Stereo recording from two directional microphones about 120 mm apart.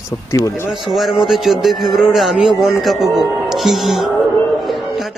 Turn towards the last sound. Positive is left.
turn(degrees=0)  # may be behind; listen again after turning